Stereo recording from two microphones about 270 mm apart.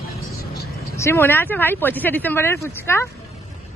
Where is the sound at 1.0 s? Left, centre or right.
Centre.